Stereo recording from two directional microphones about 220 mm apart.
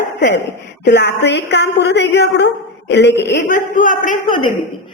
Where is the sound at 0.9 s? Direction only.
50° left (ahead or behind).